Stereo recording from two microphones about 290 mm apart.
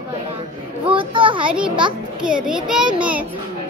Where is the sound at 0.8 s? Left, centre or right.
Centre.